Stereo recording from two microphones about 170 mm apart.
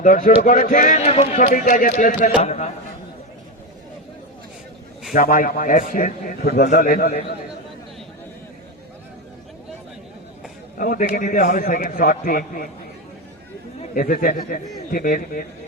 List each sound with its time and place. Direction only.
0.0 s speech: 50° left (ahead or behind)
2.4 s a man's voice: 40° left (ahead or behind)
5.1 s speech: 55° left (ahead or behind)
10.8 s speech: 55° left (ahead or behind)
13.8 s speech: 50° left (ahead or behind)